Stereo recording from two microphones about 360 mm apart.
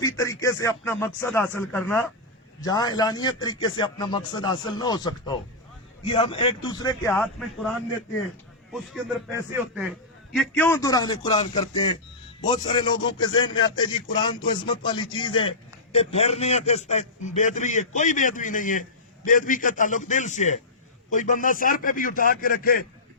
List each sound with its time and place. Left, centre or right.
0.0 s a man's voice: centre
9.3 s a man's voice: centre; by 22.8 s left